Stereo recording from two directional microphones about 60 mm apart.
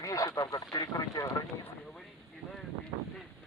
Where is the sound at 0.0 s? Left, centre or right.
Left.